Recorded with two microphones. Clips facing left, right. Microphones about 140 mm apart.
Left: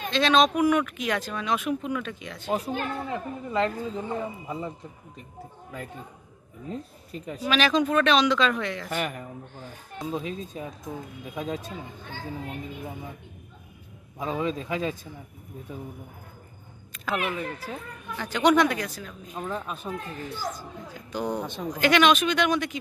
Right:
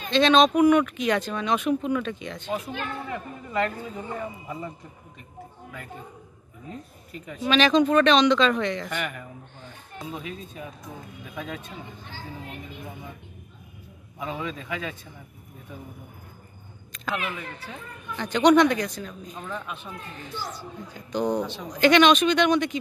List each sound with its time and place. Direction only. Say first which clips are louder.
0.1 s speech: right 3 dB; centre (ahead or behind)
2.5 s speech: left 3 dB; 35° left (ahead or behind)
3.1 s speech: left 3 dB; 25° left (ahead or behind)
7.1 s speech: left 1 dB; 35° left (ahead or behind)
7.4 s speech: right 4 dB; 5° left (ahead or behind)
8.9 s speech: left 2 dB; 35° left (ahead or behind)
11.3 s speech: left 4 dB; 25° left (ahead or behind)
14.2 s speech: left 4 dB; 35° left (ahead or behind)
16.9 s a sound: left 1 dB; 5° left (ahead or behind)
17.6 s speech: left 2 dB; 5° left (ahead or behind)
19.5 s speech: left 3 dB; 40° left (ahead or behind)
20.9 s speech: right 4 dB; 5° left (ahead or behind)